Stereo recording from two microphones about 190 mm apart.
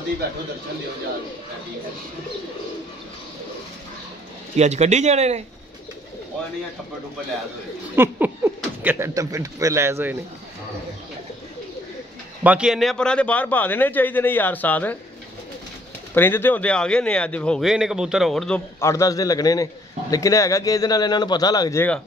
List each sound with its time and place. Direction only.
4.6 s speech: 35° right (ahead or behind)
7.9 s speech: 10° right (ahead or behind)
12.4 s a man's voice: 5° right (ahead or behind)
16.2 s a man's voice: 10° left (ahead or behind)
18.8 s a man's voice: 15° left (ahead or behind)